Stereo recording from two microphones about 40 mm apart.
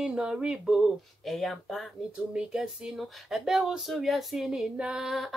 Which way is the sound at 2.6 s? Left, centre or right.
Centre.